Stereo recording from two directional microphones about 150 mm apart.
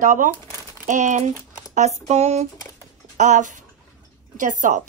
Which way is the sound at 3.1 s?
55° right (ahead or behind).